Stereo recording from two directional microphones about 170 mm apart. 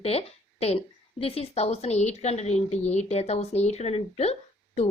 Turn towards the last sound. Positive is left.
turn(degrees=40)  # may be behind; listen again after turning